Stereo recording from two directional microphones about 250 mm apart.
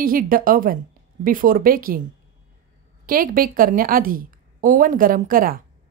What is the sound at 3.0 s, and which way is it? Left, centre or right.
A woman's voice, right.